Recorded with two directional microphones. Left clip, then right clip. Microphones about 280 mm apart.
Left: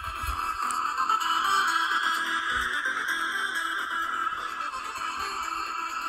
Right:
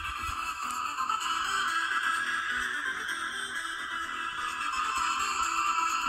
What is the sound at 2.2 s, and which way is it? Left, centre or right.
Music, left.